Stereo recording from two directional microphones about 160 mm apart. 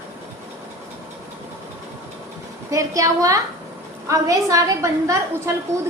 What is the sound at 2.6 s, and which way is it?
A woman's voice, 20° right (ahead or behind).